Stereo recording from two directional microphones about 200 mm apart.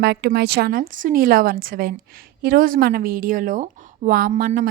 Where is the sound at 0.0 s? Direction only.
55° right (ahead or behind).